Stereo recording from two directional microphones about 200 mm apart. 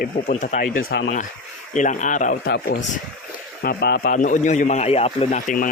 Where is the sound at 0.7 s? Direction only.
50° left (ahead or behind).